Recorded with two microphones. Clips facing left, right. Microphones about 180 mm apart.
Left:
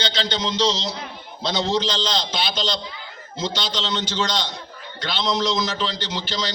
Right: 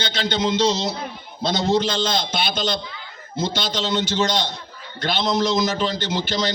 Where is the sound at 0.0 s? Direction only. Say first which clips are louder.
Right 2 dB; 50° right (ahead or behind).